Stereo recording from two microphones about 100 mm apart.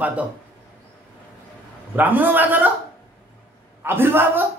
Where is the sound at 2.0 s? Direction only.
20° right (ahead or behind).